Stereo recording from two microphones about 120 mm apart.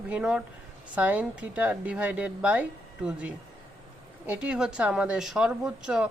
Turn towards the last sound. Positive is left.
turn(degrees=-5)  # may be behind; listen again after turning